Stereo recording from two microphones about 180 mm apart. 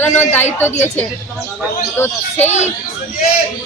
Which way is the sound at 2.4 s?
40° left (ahead or behind).